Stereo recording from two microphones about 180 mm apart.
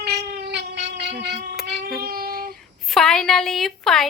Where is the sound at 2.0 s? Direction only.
55° right (ahead or behind).